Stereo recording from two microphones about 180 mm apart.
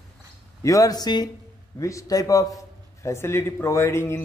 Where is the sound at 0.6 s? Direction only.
20° left (ahead or behind).